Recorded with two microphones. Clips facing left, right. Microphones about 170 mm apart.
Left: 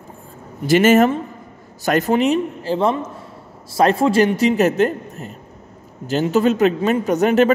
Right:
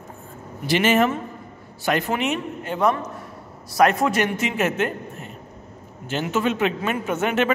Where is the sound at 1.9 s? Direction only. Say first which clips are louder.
Left 6 dB; 40° left (ahead or behind).